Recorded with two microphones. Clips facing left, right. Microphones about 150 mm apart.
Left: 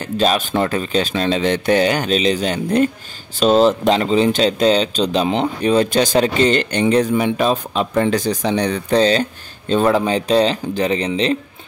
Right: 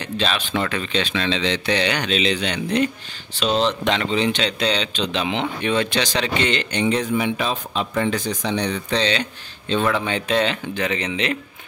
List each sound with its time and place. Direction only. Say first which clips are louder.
0.0 s speech: left 7 dB; 45° left (ahead or behind)